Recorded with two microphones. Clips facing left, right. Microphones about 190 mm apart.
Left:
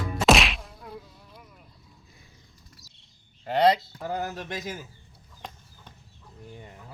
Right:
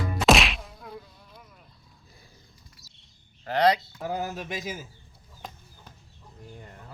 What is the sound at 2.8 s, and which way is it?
Bird flight, 40° left (ahead or behind).